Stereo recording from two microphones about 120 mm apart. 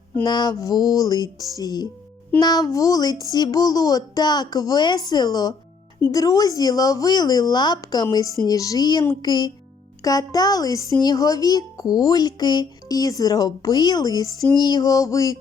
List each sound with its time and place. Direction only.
0.3 s speech: 35° left (ahead or behind)